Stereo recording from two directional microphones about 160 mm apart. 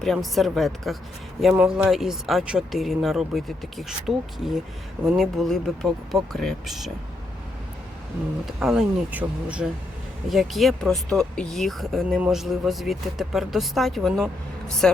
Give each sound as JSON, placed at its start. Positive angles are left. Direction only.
{"t": 0.0, "sound": "speech", "side_deg": 0}
{"t": 8.4, "sound": "speech", "side_deg": 0}